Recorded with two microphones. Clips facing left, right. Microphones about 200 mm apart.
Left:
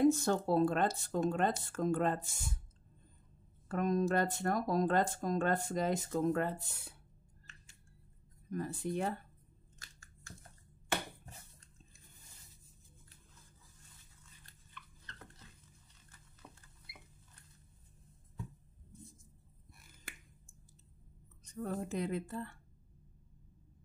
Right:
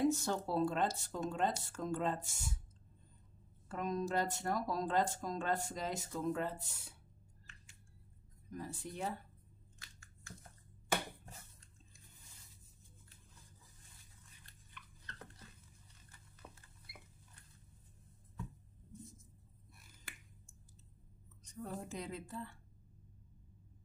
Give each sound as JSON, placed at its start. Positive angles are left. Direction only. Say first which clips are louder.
{"t": 0.1, "sound": "speech", "louder": "left 5 dB", "side_deg": 55}
{"t": 3.7, "sound": "speech", "louder": "left 5 dB", "side_deg": 55}
{"t": 8.5, "sound": "speech", "louder": "left 8 dB", "side_deg": 55}
{"t": 9.8, "sound": "scissors", "louder": "left 2 dB", "side_deg": 40}
{"t": 16.4, "sound": "rodents", "louder": "even", "side_deg": -10}
{"t": 21.6, "sound": "speech", "louder": "left 7 dB", "side_deg": 60}